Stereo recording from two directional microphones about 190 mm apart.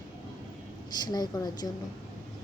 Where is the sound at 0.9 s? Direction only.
20° left (ahead or behind).